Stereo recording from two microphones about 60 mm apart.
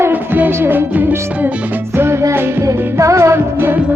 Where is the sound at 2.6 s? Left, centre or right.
Right.